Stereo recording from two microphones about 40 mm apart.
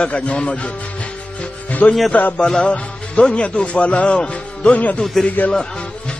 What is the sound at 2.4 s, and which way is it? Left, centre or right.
Speech, left.